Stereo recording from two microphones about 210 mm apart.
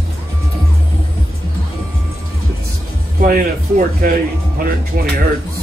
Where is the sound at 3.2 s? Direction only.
40° right (ahead or behind).